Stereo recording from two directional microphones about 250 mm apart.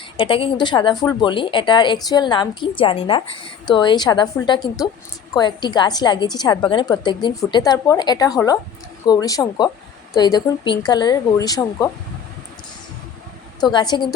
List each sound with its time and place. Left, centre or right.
0.2 s a woman's voice: left
13.6 s a woman's voice: centre